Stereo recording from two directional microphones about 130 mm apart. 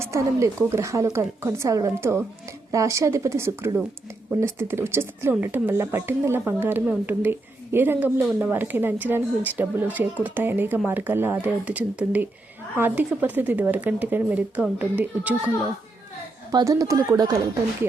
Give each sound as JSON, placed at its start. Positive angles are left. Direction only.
{"t": 0.0, "sound": "a woman's voice", "side_deg": -20}
{"t": 16.5, "sound": "a woman's voice", "side_deg": -30}